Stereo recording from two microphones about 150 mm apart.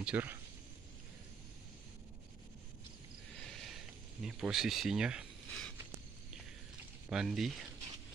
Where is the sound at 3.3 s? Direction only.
Centre (ahead or behind).